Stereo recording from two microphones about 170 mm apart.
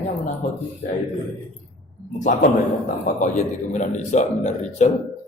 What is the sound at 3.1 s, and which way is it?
A man's voice, 45° left (ahead or behind).